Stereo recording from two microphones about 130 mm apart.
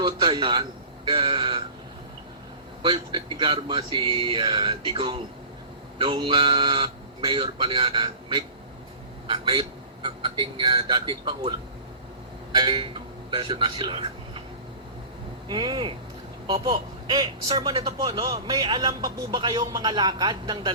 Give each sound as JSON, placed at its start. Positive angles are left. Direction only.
{"t": 0.0, "sound": "speech", "side_deg": -40}
{"t": 2.8, "sound": "speech", "side_deg": -40}
{"t": 15.4, "sound": "speech", "side_deg": -35}